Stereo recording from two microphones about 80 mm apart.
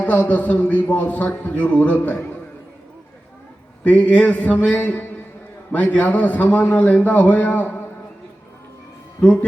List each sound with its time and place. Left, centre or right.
0.0 s a man's voice: centre
3.8 s a man's voice: centre
9.2 s a man's voice: centre